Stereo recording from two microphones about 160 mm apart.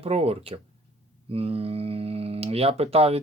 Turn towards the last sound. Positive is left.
turn(degrees=-40)  # may be behind; listen again after turning